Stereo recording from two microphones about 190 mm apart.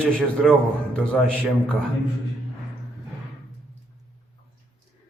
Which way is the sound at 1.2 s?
5° left (ahead or behind).